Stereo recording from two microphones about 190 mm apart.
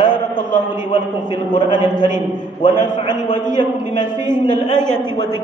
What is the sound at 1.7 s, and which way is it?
A man's voice, 25° left (ahead or behind).